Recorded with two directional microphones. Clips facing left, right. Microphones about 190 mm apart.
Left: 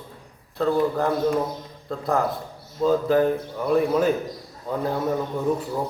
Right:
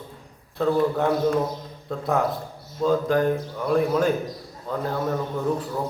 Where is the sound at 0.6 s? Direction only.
Centre (ahead or behind).